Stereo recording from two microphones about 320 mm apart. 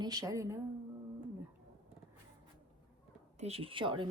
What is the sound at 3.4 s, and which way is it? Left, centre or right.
Speech, centre.